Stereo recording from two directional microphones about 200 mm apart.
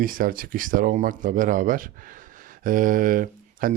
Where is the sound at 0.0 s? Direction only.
45° right (ahead or behind).